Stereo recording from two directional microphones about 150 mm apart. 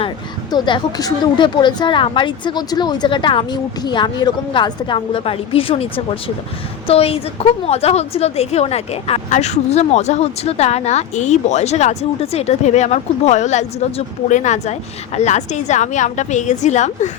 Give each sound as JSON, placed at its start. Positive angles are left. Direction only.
{"t": 0.5, "sound": "speech", "side_deg": 30}